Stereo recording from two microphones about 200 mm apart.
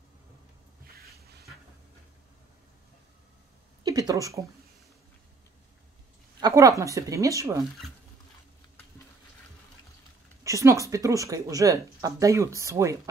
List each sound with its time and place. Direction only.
3.8 s a woman's voice: 20° right (ahead or behind)
6.4 s a woman's voice: 15° right (ahead or behind)
10.4 s speech: 15° right (ahead or behind)